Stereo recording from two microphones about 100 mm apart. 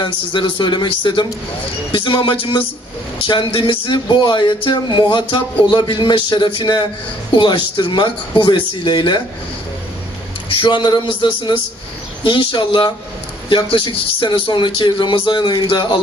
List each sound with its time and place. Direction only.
0.0 s speech: 55° left (ahead or behind)
10.5 s speech: 55° left (ahead or behind)
12.2 s speech: 55° left (ahead or behind)